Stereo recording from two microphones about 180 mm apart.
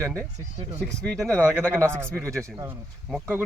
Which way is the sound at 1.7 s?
15° right (ahead or behind).